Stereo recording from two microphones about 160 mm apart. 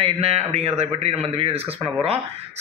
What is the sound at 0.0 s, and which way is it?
A man's voice, 40° right (ahead or behind).